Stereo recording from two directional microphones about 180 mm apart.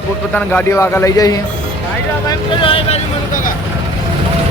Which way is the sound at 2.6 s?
30° left (ahead or behind).